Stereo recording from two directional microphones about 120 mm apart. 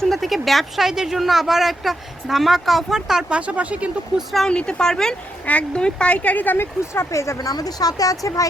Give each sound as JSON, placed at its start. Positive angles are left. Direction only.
{"t": 0.0, "sound": "speech", "side_deg": 0}
{"t": 4.4, "sound": "a woman's voice", "side_deg": 5}